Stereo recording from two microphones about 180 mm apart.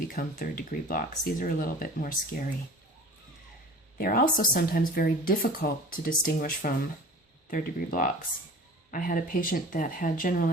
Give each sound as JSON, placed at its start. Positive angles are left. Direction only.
{"t": 0.1, "sound": "speech", "side_deg": 50}
{"t": 3.9, "sound": "speech", "side_deg": 55}